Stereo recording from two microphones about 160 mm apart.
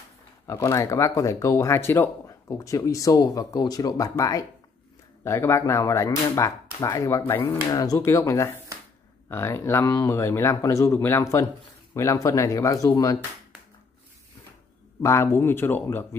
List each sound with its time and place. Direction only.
0.5 s speech: 20° left (ahead or behind)
15.0 s speech: 20° left (ahead or behind)